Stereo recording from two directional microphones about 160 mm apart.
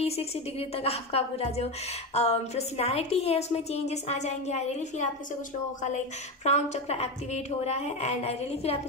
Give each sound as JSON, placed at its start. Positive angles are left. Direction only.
{"t": 0.0, "sound": "a woman's voice", "side_deg": 40}
{"t": 6.4, "sound": "a woman's voice", "side_deg": 45}